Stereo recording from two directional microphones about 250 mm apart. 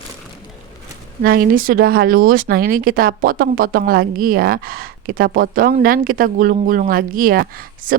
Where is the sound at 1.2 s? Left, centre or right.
Right.